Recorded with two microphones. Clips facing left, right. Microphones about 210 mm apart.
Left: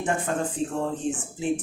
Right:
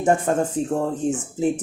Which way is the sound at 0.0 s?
40° right (ahead or behind).